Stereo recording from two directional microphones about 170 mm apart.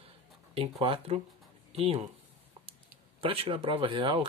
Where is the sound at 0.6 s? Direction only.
35° right (ahead or behind).